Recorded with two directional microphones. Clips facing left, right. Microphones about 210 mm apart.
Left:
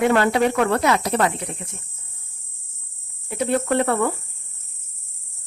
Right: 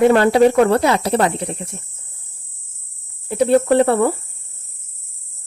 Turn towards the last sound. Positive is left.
turn(degrees=-30)  # may be behind; listen again after turning